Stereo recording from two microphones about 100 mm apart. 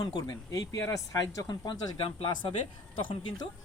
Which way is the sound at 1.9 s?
70° left (ahead or behind).